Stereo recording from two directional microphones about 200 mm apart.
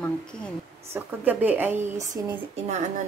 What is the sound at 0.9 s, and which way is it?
A woman's voice, 10° right (ahead or behind).